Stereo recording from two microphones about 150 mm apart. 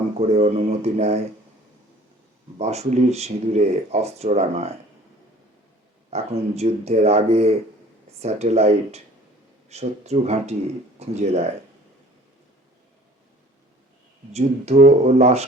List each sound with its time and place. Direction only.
0.3 s speech: 45° right (ahead or behind)
2.6 s speech: 45° right (ahead or behind)
6.1 s speech: 45° right (ahead or behind)
14.3 s speech: 45° right (ahead or behind)